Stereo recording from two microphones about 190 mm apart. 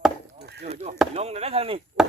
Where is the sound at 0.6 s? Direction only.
35° right (ahead or behind).